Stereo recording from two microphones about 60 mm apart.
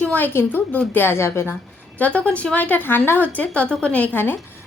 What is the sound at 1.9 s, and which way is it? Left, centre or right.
A woman's voice, left.